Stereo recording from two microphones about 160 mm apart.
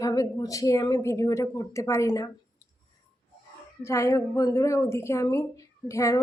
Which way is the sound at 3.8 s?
20° left (ahead or behind).